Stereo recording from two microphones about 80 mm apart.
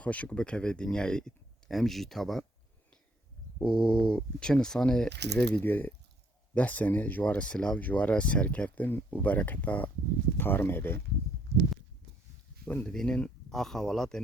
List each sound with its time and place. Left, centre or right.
0.0 s speech: centre
3.6 s speech: centre; by 10.9 s left
12.6 s speech: centre